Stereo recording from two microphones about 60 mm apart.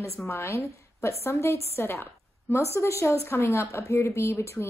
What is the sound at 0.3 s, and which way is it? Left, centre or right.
A woman's voice, left.